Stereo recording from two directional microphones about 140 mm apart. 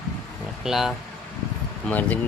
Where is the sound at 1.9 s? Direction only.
10° left (ahead or behind).